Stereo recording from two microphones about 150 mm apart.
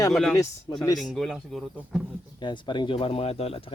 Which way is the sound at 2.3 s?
30° left (ahead or behind).